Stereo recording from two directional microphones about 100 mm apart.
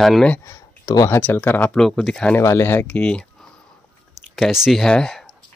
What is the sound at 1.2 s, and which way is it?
Speech, 20° left (ahead or behind).